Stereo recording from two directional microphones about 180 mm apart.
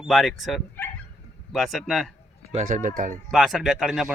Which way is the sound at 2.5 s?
45° right (ahead or behind).